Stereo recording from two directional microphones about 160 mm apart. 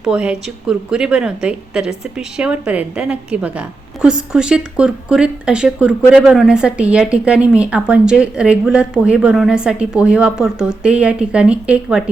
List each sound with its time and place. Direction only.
0.0 s a woman's voice: 5° right (ahead or behind)